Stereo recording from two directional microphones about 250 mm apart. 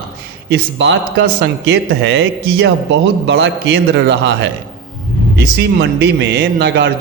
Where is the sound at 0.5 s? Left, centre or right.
Right.